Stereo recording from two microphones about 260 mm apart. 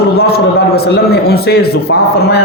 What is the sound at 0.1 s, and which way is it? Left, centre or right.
A man's voice, left.